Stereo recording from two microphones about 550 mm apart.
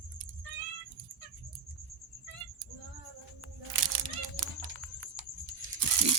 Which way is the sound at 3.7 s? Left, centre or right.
Right.